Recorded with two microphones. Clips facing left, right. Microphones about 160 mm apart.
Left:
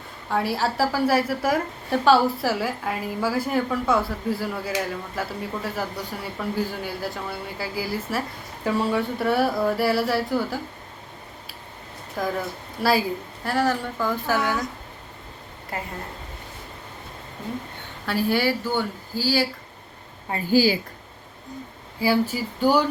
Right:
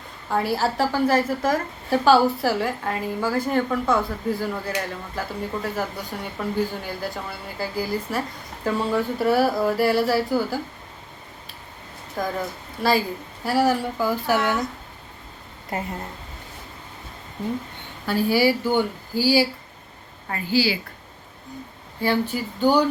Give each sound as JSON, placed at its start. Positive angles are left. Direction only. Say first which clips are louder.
{"t": 0.3, "sound": "a woman's voice", "louder": "right 1 dB", "side_deg": 0}
{"t": 12.2, "sound": "a woman's voice", "louder": "even", "side_deg": 0}
{"t": 13.4, "sound": "speech", "louder": "right 3 dB", "side_deg": -10}
{"t": 15.7, "sound": "speech", "louder": "right 3 dB", "side_deg": -20}
{"t": 18.0, "sound": "speech", "louder": "right 3 dB", "side_deg": 0}
{"t": 20.5, "sound": "speech", "louder": "left 3 dB", "side_deg": 45}
{"t": 22.0, "sound": "speech", "louder": "left 1 dB", "side_deg": 5}